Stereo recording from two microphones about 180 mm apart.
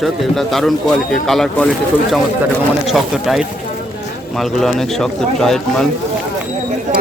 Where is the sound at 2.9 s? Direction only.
Centre (ahead or behind).